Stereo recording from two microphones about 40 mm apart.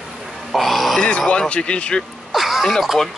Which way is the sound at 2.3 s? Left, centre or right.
Centre.